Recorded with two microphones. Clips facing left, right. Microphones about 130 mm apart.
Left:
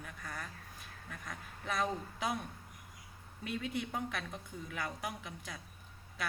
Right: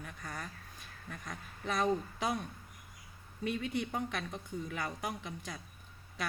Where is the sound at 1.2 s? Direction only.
Centre (ahead or behind).